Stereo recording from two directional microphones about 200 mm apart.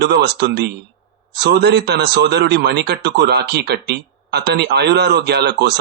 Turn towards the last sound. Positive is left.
turn(degrees=-55)  # may be behind; listen again after turning